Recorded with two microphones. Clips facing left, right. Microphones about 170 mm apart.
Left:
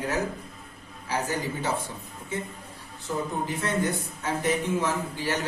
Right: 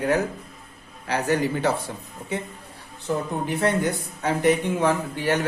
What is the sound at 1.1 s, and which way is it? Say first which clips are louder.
Speech: right 6 dB; 70° right (ahead or behind).